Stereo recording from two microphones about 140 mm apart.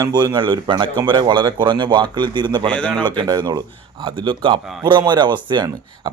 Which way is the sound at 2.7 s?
10° left (ahead or behind).